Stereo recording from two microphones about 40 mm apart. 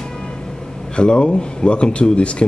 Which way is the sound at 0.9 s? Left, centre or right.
Left.